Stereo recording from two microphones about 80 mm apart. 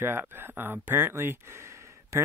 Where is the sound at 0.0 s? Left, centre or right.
Right.